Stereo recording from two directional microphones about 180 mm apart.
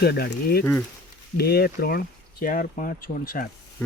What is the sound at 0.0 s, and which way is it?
Speech, 65° left (ahead or behind).